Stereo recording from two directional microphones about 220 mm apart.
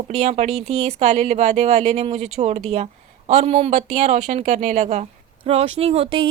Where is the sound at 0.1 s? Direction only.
30° right (ahead or behind).